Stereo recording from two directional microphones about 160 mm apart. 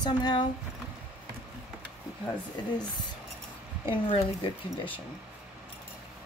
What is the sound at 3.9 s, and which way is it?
Speech, 35° left (ahead or behind).